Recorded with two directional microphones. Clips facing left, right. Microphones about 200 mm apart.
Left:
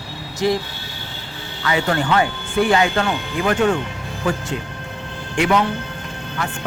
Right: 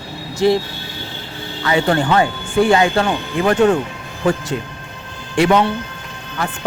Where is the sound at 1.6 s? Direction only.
30° right (ahead or behind).